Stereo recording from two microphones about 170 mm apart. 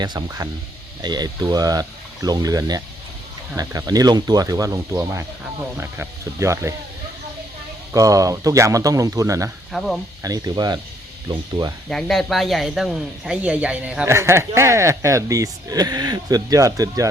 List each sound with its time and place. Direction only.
0.0 s speech: 25° right (ahead or behind)
7.9 s speech: 20° right (ahead or behind)
9.7 s speech: centre (ahead or behind)
10.2 s speech: 20° right (ahead or behind)
11.9 s speech: centre (ahead or behind); by 17.1 s 20° right (ahead or behind)